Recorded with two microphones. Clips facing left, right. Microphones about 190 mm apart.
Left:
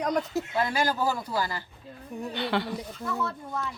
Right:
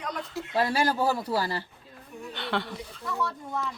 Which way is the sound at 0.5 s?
30° right (ahead or behind).